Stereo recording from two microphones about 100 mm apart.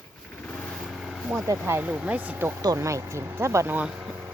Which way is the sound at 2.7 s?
30° right (ahead or behind).